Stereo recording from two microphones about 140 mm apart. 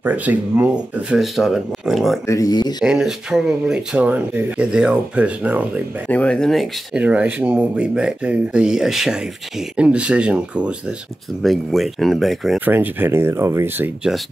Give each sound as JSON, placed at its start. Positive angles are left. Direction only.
{"t": 0.0, "sound": "speech", "side_deg": -10}
{"t": 2.2, "sound": "speech", "side_deg": 25}
{"t": 2.8, "sound": "speech", "side_deg": -5}
{"t": 6.0, "sound": "speech", "side_deg": 10}
{"t": 7.0, "sound": "speech", "side_deg": -10}
{"t": 12.5, "sound": "speech", "side_deg": -10}